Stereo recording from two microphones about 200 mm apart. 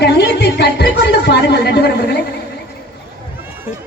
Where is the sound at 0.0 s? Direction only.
55° left (ahead or behind).